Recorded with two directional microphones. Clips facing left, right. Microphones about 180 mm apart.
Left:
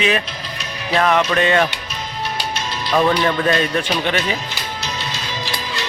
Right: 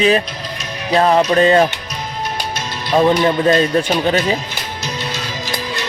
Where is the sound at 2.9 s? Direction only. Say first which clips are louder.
Right 4 dB; 25° right (ahead or behind).